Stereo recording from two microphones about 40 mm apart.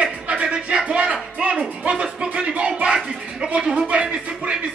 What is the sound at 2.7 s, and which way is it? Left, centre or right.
Music, centre.